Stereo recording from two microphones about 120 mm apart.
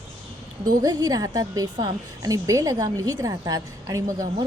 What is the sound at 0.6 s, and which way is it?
A woman's voice, 30° right (ahead or behind).